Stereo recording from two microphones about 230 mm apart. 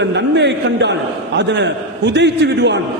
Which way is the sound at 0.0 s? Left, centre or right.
Right.